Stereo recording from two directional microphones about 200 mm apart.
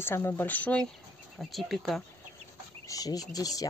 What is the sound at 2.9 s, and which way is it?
Speech, 20° left (ahead or behind).